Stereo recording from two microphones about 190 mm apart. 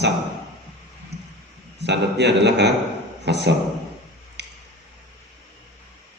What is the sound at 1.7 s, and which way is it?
A man's voice, 65° right (ahead or behind).